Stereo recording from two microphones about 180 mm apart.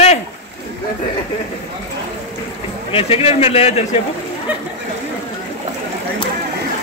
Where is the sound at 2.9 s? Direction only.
35° left (ahead or behind).